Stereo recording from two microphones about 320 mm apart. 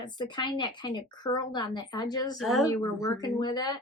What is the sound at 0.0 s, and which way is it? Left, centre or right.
A woman's voice, centre.